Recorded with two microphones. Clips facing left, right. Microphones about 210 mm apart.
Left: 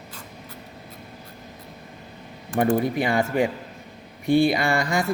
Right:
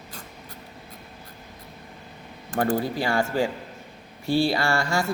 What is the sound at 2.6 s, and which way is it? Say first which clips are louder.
A man's voice: left 3 dB; 20° left (ahead or behind).